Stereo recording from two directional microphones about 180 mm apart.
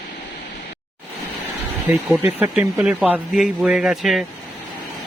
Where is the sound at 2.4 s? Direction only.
5° right (ahead or behind).